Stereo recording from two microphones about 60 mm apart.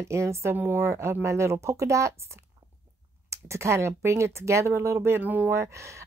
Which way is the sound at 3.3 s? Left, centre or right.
Right.